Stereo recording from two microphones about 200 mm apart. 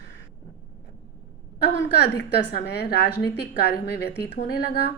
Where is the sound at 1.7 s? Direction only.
60° left (ahead or behind).